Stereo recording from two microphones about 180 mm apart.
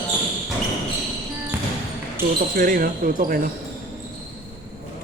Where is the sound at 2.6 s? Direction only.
55° right (ahead or behind).